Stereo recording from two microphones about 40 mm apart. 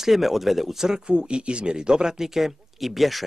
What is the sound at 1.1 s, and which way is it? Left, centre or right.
Speech, right.